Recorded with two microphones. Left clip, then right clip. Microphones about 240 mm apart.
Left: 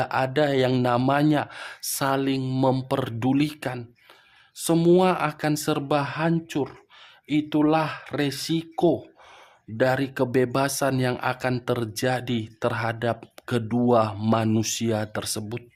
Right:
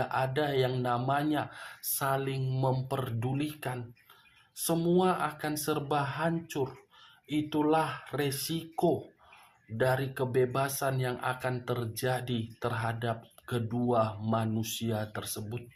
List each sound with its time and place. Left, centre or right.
0.0 s speech: left